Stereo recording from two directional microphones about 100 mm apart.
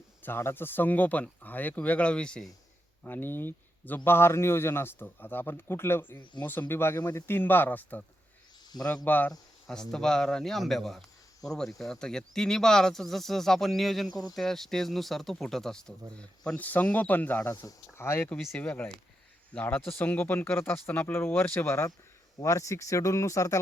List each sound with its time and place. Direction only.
0.2 s speech: 20° left (ahead or behind)
3.0 s a man's voice: 20° left (ahead or behind)
8.7 s speech: 45° left (ahead or behind)
9.0 s speech: 20° left (ahead or behind)
9.6 s a man's voice: 5° left (ahead or behind); by 23.6 s 30° left (ahead or behind)